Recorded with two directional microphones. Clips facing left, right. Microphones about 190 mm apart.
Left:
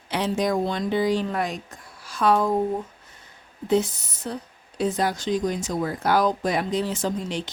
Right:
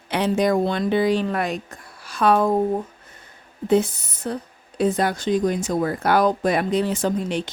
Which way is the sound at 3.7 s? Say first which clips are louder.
Right 3 dB; 55° right (ahead or behind).